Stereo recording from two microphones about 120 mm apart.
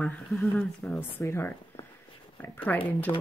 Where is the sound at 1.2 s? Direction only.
20° left (ahead or behind).